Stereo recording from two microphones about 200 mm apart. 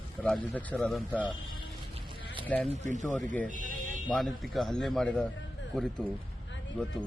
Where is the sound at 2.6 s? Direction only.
35° right (ahead or behind).